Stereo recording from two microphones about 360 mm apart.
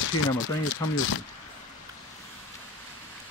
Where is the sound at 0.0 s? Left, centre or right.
Left.